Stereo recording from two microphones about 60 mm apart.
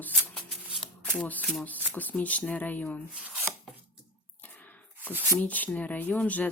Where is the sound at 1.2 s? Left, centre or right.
Left.